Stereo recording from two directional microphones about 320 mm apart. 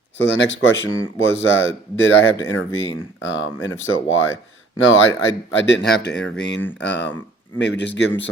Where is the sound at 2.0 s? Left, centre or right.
Left.